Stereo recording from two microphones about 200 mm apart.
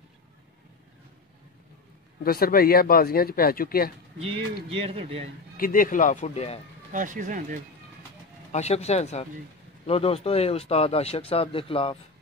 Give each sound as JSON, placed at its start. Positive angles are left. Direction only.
{"t": 2.2, "sound": "speech", "side_deg": 50}
{"t": 4.6, "sound": "speech", "side_deg": -30}
{"t": 5.6, "sound": "speech", "side_deg": 45}
{"t": 6.9, "sound": "speech", "side_deg": -40}
{"t": 8.5, "sound": "speech", "side_deg": 35}